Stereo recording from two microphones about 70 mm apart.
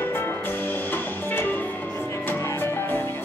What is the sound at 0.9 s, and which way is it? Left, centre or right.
Music, left.